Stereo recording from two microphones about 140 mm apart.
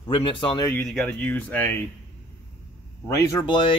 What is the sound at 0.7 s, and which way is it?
Speech, 5° left (ahead or behind).